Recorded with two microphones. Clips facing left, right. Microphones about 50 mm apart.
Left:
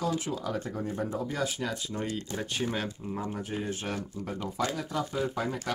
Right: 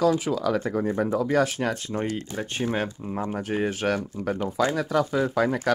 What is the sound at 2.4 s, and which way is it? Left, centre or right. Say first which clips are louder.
Speech: right 6 dB; right.